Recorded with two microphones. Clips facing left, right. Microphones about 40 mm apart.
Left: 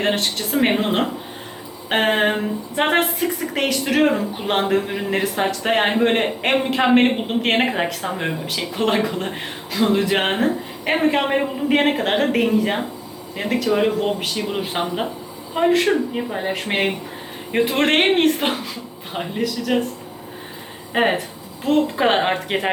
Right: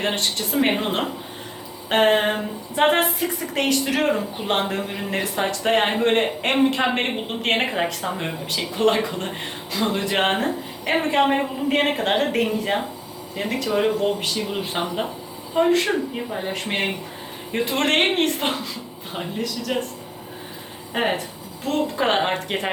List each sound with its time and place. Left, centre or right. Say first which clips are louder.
0.0 s a man's voice: left 3 dB; centre
20.9 s a man's voice: left 4 dB; centre